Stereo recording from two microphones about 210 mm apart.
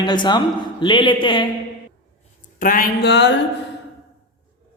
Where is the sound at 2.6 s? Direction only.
40° left (ahead or behind).